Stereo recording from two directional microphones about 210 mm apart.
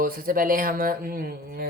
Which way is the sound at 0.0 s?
45° right (ahead or behind).